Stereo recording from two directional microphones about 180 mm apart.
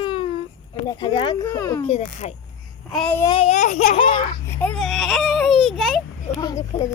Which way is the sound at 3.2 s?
25° left (ahead or behind).